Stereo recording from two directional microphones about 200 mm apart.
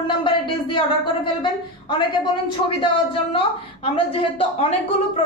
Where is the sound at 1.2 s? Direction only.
25° left (ahead or behind).